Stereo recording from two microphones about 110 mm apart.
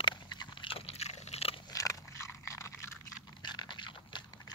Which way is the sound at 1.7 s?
30° left (ahead or behind).